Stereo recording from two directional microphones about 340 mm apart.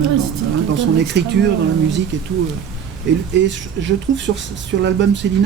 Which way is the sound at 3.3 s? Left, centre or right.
Right.